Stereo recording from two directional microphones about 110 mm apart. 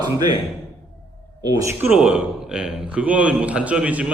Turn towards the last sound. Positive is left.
turn(degrees=-10)  # may be behind; listen again after turning